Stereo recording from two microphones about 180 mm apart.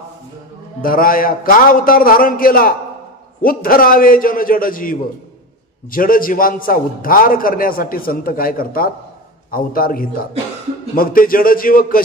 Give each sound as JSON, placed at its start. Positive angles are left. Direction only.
{"t": 0.8, "sound": "a man's voice", "side_deg": 50}